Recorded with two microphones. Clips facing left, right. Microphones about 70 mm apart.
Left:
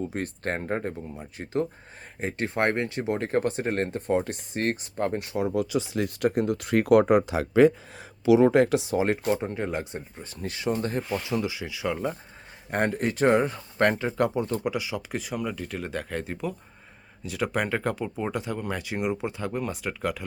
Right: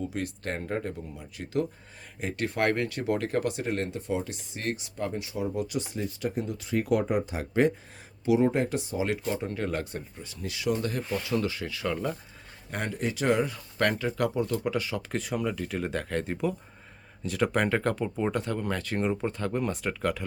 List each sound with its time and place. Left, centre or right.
0.1 s speech: left
5.5 s speech: left
9.4 s speech: left
10.2 s speech: left
11.2 s speech: centre
12.7 s speech: left
13.2 s speech: left
14.6 s speech: centre